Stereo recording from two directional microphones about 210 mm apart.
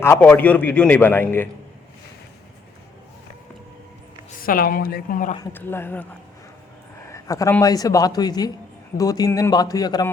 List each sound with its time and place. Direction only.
0.0 s a man's voice: 10° left (ahead or behind)
4.4 s a woman's voice: 45° left (ahead or behind)
5.5 s a man's voice: 10° left (ahead or behind)